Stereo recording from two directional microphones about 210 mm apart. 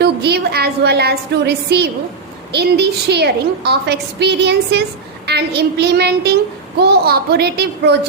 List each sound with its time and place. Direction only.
0.0 s a woman's voice: 50° right (ahead or behind)